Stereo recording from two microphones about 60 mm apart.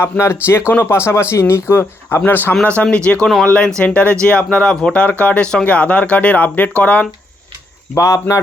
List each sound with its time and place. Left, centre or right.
0.0 s speech: left
2.9 s speech: centre
7.9 s speech: left